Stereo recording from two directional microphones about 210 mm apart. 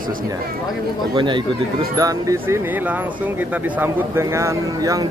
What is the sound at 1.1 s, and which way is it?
Speech, 20° right (ahead or behind).